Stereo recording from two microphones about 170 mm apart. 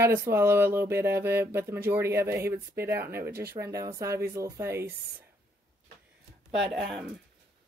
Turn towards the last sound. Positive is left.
turn(degrees=0)  # may be behind; listen again after turning